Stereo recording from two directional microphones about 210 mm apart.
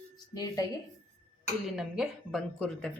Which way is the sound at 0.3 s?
15° left (ahead or behind).